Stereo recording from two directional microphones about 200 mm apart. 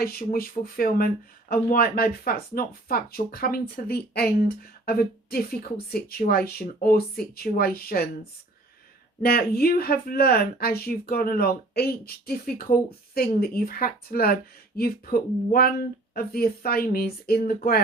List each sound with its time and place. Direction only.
0.0 s speech: 50° left (ahead or behind)
9.2 s speech: 50° left (ahead or behind)